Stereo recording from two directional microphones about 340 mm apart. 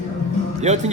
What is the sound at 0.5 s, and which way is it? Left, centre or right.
Speech, centre.